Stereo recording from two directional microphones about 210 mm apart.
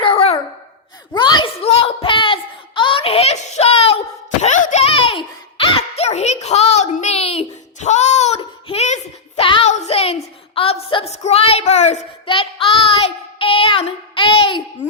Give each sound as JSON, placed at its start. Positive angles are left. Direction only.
{"t": 0.0, "sound": "sigh", "side_deg": 30}
{"t": 1.1, "sound": "a sound", "side_deg": 20}
{"t": 12.6, "sound": "child singing", "side_deg": 25}